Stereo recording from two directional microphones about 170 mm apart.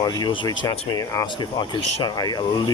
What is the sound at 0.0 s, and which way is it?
Speech, 25° left (ahead or behind).